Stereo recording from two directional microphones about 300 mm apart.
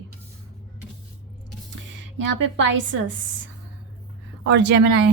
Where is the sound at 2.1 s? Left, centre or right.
Right.